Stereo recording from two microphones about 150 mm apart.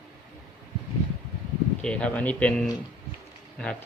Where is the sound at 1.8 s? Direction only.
5° left (ahead or behind).